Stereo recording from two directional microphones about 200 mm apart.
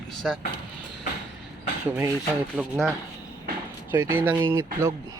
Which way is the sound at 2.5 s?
Centre (ahead or behind).